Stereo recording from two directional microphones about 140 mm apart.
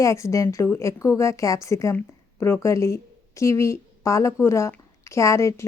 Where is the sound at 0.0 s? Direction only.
20° left (ahead or behind).